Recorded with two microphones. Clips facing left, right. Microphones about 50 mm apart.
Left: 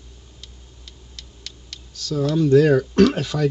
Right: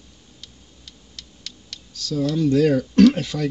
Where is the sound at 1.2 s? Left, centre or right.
Left.